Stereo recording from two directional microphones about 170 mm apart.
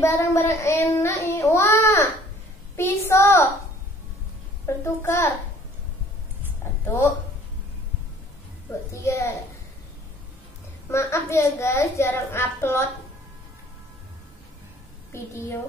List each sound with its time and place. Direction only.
0.0 s child singing: 15° left (ahead or behind)
2.7 s a sound: 15° left (ahead or behind)
4.6 s a child's voice: 15° left (ahead or behind)
8.9 s a child's voice: 15° left (ahead or behind)
10.9 s a child's voice: 15° left (ahead or behind)
15.1 s a child's voice: 15° left (ahead or behind)